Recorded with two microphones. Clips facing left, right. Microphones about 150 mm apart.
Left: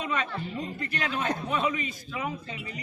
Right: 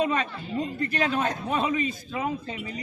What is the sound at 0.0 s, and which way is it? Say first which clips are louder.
Speech: right 5 dB; 35° right (ahead or behind).